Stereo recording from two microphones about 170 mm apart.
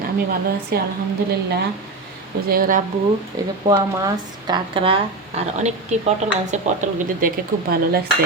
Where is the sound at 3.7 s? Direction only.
20° right (ahead or behind); by 7.3 s 45° right (ahead or behind).